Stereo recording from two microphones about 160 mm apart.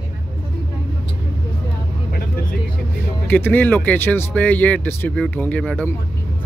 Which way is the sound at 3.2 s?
10° left (ahead or behind).